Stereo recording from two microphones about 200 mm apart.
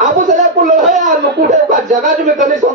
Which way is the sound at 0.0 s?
40° right (ahead or behind).